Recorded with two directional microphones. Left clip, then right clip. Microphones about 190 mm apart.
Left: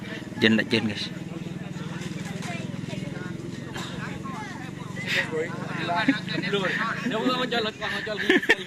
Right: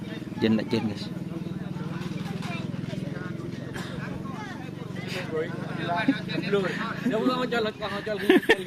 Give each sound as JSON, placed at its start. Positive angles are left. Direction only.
{"t": 0.4, "sound": "a man's voice", "side_deg": 0}
{"t": 5.8, "sound": "speech", "side_deg": -60}
{"t": 6.7, "sound": "speech", "side_deg": -15}
{"t": 7.1, "sound": "speech", "side_deg": -65}
{"t": 7.9, "sound": "speech", "side_deg": -15}